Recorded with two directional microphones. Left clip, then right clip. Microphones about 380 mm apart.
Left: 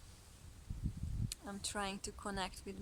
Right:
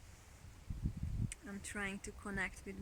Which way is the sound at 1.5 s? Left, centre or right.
Centre.